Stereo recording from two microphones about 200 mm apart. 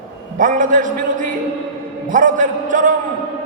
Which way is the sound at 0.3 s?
40° right (ahead or behind).